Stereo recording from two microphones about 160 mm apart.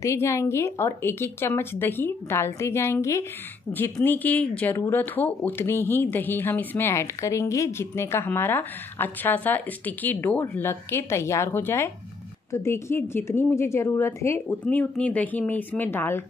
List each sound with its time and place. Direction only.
0.0 s speech: 15° left (ahead or behind)